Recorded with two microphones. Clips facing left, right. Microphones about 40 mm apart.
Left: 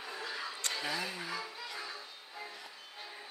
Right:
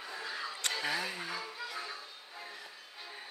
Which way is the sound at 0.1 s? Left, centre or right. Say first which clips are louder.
Right 1 dB; centre.